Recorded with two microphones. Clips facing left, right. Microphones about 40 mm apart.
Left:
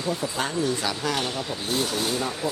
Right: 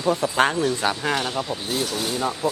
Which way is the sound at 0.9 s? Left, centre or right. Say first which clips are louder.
Right 3 dB; right.